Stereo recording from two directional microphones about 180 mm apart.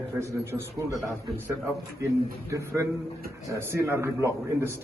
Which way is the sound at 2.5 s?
15° right (ahead or behind).